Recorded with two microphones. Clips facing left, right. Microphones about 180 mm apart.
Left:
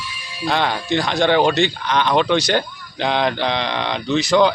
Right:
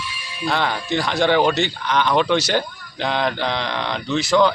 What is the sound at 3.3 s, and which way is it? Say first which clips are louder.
Speech: left 2 dB; 5° right (ahead or behind).